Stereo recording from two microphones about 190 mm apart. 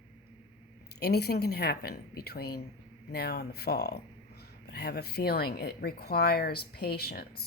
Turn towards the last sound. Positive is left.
turn(degrees=55)  # may be behind; listen again after turning